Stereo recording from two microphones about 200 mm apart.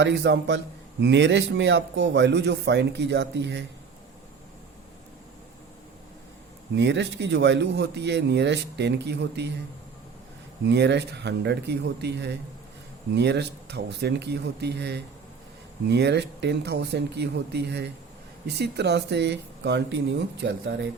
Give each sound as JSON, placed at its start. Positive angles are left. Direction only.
{"t": 0.0, "sound": "speech", "side_deg": -60}
{"t": 6.7, "sound": "speech", "side_deg": -60}
{"t": 10.6, "sound": "speech", "side_deg": -60}